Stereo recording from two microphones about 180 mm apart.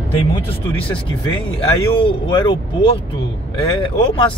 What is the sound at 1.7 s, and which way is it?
Speech, 30° left (ahead or behind).